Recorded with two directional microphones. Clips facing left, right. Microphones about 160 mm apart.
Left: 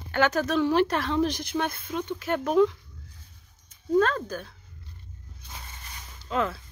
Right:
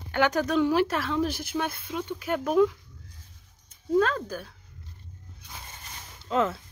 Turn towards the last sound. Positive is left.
turn(degrees=-20)  # may be behind; listen again after turning